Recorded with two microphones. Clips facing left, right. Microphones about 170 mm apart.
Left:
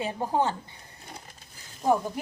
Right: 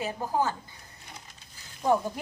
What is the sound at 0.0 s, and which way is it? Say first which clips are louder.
Speech: left 2 dB; 25° left (ahead or behind).